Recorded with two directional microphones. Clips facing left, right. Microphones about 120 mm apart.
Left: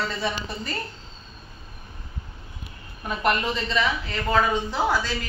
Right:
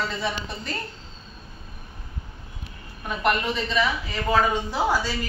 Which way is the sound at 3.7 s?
10° right (ahead or behind).